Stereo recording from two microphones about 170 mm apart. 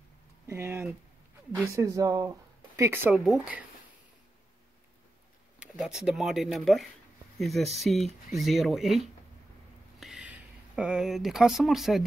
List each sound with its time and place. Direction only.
0.5 s speech: 15° right (ahead or behind)
5.6 s speech: 5° right (ahead or behind)
9.9 s a sound: centre (ahead or behind)
10.8 s speech: 5° right (ahead or behind)